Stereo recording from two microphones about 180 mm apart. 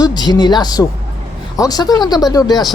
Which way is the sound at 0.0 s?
25° left (ahead or behind).